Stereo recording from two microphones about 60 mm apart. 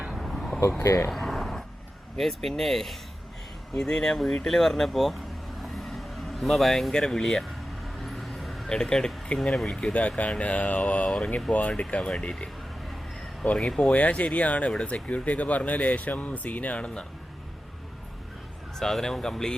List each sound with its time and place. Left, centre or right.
0.1 s a sound: centre
0.8 s speech: left
1.1 s a sound: centre
2.1 s speech: centre
5.7 s vehicle: centre
6.9 s speech: centre
8.0 s vehicle: centre
8.7 s speech: centre
10.2 s speech: left
13.6 s speech: centre
13.9 s speech: left
18.8 s speech: centre